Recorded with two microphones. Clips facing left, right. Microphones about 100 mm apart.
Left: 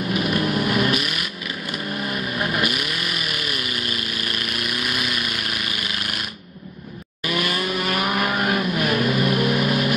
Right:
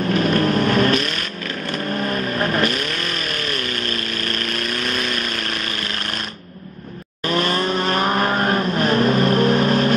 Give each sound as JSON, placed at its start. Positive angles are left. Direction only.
{"t": 0.2, "sound": "vehicle", "side_deg": -40}
{"t": 2.0, "sound": "vehicle", "side_deg": -40}
{"t": 2.6, "sound": "vehicle", "side_deg": 10}
{"t": 7.2, "sound": "vehicle", "side_deg": -35}